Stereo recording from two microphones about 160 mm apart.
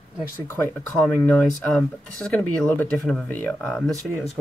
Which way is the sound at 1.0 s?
5° left (ahead or behind).